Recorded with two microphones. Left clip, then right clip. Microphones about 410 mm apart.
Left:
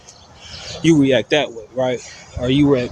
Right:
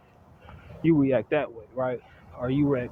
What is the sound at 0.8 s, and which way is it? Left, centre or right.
Speech, right.